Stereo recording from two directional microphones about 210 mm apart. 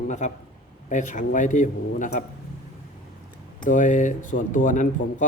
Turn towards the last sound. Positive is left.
turn(degrees=35)  # may be behind; listen again after turning